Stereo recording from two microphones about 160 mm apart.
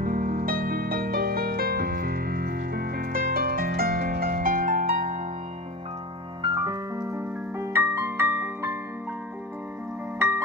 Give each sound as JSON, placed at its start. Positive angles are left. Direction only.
{"t": 0.0, "sound": "music", "side_deg": -60}
{"t": 6.4, "sound": "music", "side_deg": -25}
{"t": 10.1, "sound": "music", "side_deg": -15}